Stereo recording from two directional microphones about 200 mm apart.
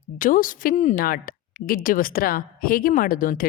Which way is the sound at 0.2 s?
45° left (ahead or behind).